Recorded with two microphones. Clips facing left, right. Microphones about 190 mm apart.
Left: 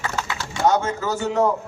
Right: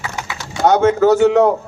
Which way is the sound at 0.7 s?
70° right (ahead or behind).